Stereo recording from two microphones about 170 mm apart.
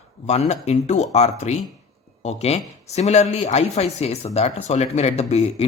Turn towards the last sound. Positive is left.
turn(degrees=40)  # may be behind; listen again after turning